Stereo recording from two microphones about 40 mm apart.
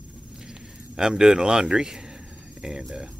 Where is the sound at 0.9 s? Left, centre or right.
Centre.